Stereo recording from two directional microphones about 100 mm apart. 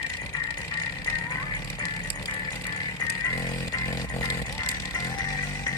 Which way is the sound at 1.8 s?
40° left (ahead or behind).